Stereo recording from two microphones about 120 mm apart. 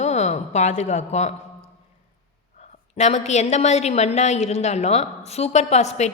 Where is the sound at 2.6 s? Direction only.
70° left (ahead or behind).